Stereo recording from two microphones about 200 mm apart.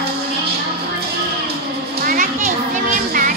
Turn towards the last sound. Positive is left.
turn(degrees=-40)  # may be behind; listen again after turning